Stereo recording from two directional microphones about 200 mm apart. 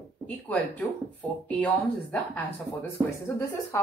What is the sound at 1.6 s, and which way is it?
Speech, 5° left (ahead or behind).